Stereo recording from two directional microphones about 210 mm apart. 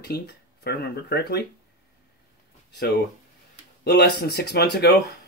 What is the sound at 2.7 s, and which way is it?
Speech, 50° left (ahead or behind).